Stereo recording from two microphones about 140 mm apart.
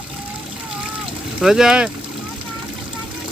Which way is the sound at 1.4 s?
5° right (ahead or behind).